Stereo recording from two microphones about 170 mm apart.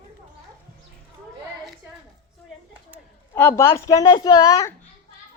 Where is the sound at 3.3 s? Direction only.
15° left (ahead or behind).